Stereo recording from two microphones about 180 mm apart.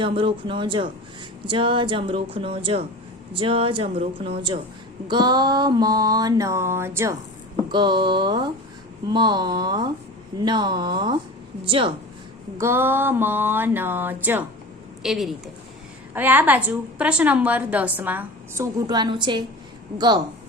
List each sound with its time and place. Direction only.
0.0 s mantra: 30° right (ahead or behind)
3.3 s speech: 30° right (ahead or behind)
5.0 s mantra: 25° right (ahead or behind)
12.5 s a woman's voice: 15° right (ahead or behind)
20.0 s mantra: 25° right (ahead or behind)